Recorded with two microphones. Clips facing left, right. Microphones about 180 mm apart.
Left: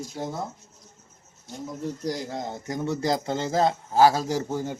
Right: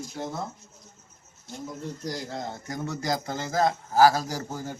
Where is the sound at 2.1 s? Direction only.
15° left (ahead or behind).